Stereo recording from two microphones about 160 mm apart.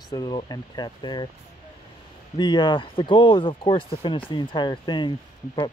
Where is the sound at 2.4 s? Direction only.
30° left (ahead or behind).